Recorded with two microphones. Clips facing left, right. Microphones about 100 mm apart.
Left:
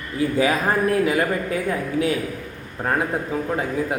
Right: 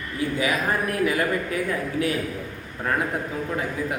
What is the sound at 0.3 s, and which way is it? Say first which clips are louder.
Speech: left 4 dB; 35° left (ahead or behind).